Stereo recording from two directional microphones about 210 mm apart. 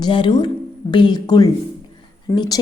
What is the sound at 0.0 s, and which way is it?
A woman's voice, 20° left (ahead or behind).